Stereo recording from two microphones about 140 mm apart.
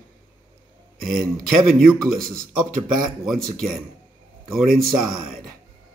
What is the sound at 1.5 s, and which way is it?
A man's voice, centre (ahead or behind).